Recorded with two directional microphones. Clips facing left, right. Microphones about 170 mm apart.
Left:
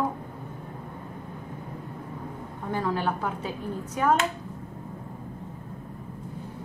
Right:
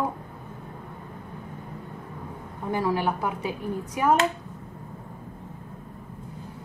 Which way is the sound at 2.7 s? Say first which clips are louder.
Right 2 dB; 10° right (ahead or behind).